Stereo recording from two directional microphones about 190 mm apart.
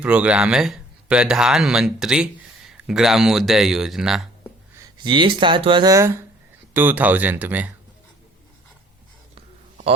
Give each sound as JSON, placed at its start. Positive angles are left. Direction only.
{"t": 0.0, "sound": "speech", "side_deg": -5}
{"t": 5.0, "sound": "speech", "side_deg": -25}
{"t": 9.3, "sound": "a sound", "side_deg": -30}